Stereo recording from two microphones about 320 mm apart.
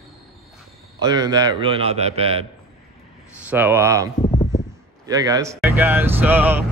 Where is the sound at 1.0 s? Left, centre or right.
Centre.